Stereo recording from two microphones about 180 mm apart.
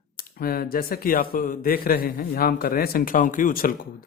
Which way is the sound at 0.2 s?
55° left (ahead or behind).